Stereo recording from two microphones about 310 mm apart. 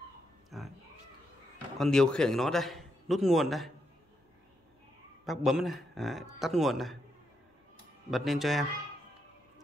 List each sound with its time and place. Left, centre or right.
0.5 s cat: centre
1.8 s a man's voice: centre
5.2 s a man's voice: centre
8.1 s a man's voice: centre